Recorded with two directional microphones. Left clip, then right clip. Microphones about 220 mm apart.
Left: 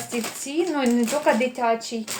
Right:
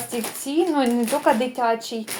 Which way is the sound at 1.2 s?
25° right (ahead or behind).